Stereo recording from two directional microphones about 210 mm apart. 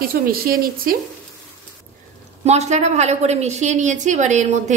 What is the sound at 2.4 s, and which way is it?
A woman's voice, 30° right (ahead or behind).